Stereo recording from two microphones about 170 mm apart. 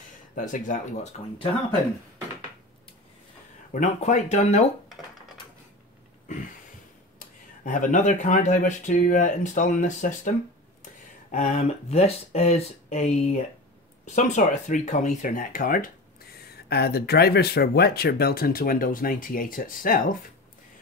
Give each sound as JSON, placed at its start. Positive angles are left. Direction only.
{"t": 0.4, "sound": "speech", "side_deg": 50}
{"t": 3.7, "sound": "speech", "side_deg": 45}
{"t": 7.2, "sound": "speech", "side_deg": 50}
{"t": 11.3, "sound": "speech", "side_deg": 40}